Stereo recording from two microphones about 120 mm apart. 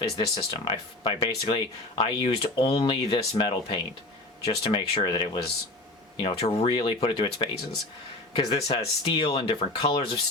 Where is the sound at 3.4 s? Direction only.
40° left (ahead or behind).